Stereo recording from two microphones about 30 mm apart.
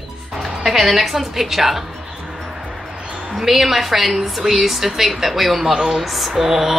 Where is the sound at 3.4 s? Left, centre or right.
Centre.